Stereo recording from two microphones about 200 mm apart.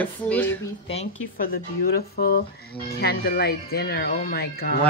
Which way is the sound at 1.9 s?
50° left (ahead or behind).